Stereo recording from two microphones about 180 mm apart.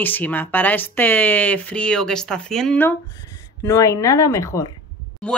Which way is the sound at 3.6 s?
15° left (ahead or behind).